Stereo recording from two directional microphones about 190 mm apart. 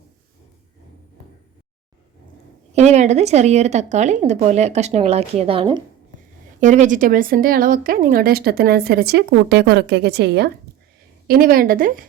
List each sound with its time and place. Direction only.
2.7 s speech: 35° right (ahead or behind)
6.6 s a woman's voice: 40° right (ahead or behind); by 10.5 s 60° right (ahead or behind)
11.3 s a woman's voice: 50° right (ahead or behind)